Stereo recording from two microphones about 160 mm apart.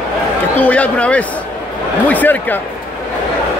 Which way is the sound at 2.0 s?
10° left (ahead or behind).